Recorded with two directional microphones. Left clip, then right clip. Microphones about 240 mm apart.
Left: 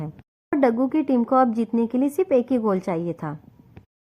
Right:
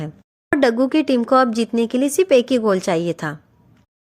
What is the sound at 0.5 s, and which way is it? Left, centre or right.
Speech, right.